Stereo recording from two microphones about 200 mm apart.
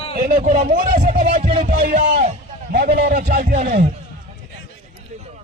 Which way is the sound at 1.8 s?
45° right (ahead or behind).